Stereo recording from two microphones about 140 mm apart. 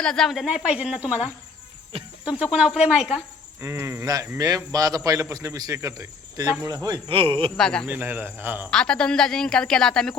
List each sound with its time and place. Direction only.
0.0 s speech: 5° left (ahead or behind)
2.2 s speech: 10° right (ahead or behind)
3.6 s speech: 20° right (ahead or behind)
6.8 s speech: 35° right (ahead or behind)
7.5 s a woman's voice: 5° left (ahead or behind)
7.9 s speech: 15° right (ahead or behind)
8.7 s a woman's voice: 5° left (ahead or behind)